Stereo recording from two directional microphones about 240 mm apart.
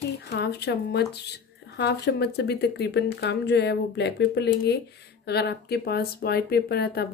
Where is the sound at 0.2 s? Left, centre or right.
Left.